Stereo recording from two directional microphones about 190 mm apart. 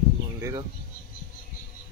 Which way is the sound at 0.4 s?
15° right (ahead or behind).